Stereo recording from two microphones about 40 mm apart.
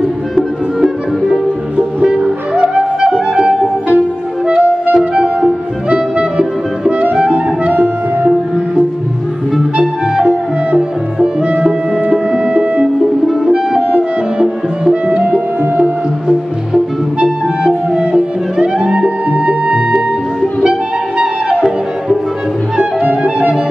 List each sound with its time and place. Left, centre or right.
0.4 s music: centre; by 7.7 s right
7.7 s music: right
10.2 s music: right
17.2 s music: centre
21.2 s flute: right
23.0 s music: right